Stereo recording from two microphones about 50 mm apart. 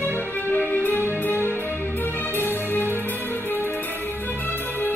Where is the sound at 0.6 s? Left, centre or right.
Left.